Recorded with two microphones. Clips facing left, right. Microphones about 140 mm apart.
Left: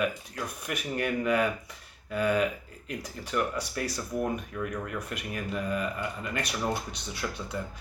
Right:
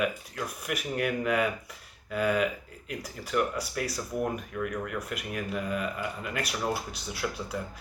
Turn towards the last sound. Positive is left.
turn(degrees=-5)  # may be behind; listen again after turning